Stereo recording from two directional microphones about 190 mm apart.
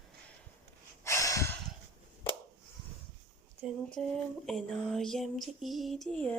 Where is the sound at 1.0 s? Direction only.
15° left (ahead or behind).